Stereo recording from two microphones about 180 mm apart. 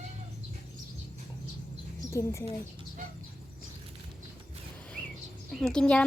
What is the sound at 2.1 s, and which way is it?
Speech, 15° left (ahead or behind).